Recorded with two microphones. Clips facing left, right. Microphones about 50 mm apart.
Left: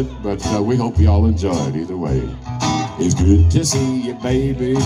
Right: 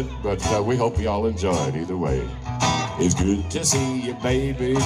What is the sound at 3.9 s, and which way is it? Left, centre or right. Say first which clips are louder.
Music: left 4 dB; right.